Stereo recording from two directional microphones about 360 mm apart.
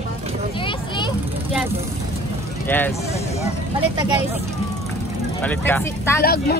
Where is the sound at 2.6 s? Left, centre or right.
Centre.